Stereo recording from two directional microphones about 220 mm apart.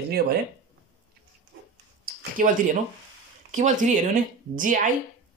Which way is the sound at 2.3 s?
35° right (ahead or behind).